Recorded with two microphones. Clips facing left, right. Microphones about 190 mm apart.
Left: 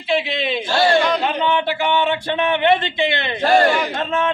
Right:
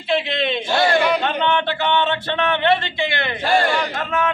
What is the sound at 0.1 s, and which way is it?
A man's voice, centre (ahead or behind).